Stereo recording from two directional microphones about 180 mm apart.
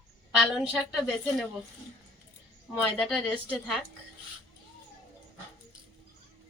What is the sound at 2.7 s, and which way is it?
A woman's voice, centre (ahead or behind).